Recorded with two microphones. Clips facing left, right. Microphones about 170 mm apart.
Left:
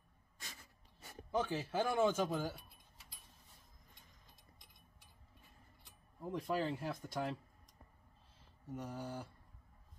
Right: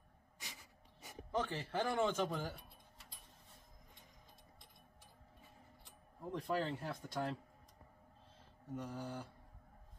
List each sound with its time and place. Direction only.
0.4 s a sound: 15° right (ahead or behind)
1.3 s speech: 5° left (ahead or behind)
6.3 s speech: 5° left (ahead or behind)
8.7 s speech: 10° left (ahead or behind)